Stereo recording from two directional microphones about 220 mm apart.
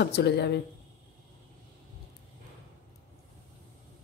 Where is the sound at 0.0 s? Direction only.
50° left (ahead or behind).